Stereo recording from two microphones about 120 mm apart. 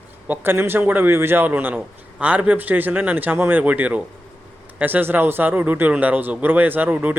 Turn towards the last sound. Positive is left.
turn(degrees=-10)  # may be behind; listen again after turning